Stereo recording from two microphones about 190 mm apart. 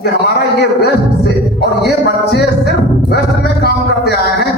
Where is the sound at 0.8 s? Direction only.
60° left (ahead or behind).